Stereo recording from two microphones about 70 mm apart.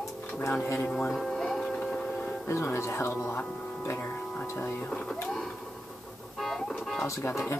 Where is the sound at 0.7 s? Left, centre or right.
Centre.